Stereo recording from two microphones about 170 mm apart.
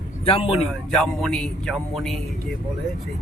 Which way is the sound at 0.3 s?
35° left (ahead or behind).